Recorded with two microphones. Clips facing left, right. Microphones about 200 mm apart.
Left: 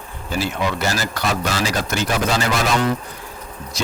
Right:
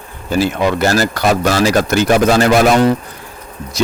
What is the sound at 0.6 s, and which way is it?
Speech, 60° right (ahead or behind).